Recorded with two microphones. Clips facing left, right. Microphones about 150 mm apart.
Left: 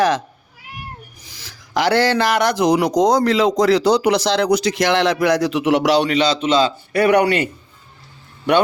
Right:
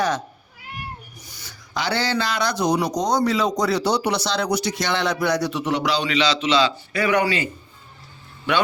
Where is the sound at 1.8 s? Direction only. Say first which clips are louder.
Left 7 dB; 70° left (ahead or behind).